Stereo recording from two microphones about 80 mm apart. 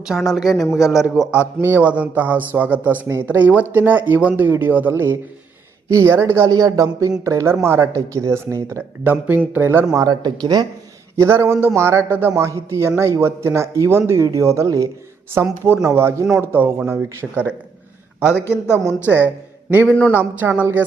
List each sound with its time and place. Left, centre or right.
0.1 s speech: centre
1.3 s a man's voice: right
6.5 s speech: right
9.0 s a man's voice: right
9.9 s speech: right
11.2 s speech: right
18.7 s speech: left
19.0 s a man's voice: right